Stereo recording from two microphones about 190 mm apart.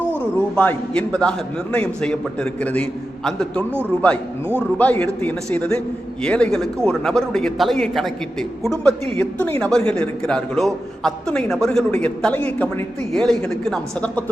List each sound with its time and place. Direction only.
0.5 s a man's voice: 5° left (ahead or behind)
4.8 s a man's voice: 10° left (ahead or behind)